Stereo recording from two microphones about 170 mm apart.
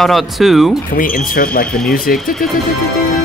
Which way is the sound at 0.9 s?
55° left (ahead or behind).